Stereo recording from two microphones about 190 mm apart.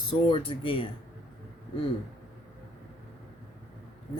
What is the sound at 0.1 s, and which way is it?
Speech, 25° left (ahead or behind).